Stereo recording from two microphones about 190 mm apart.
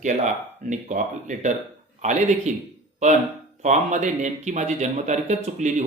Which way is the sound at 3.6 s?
40° right (ahead or behind).